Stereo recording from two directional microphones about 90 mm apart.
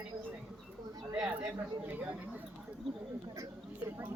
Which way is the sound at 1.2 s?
40° right (ahead or behind).